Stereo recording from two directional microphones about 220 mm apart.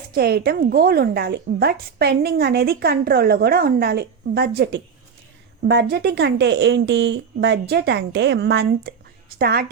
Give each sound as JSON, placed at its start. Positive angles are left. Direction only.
{"t": 0.1, "sound": "a woman's voice", "side_deg": -45}